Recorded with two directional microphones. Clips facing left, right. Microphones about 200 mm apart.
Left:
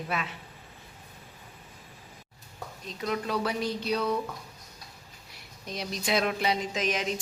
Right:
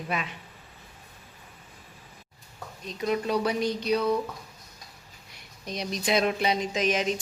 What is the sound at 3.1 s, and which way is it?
Speech, 15° right (ahead or behind).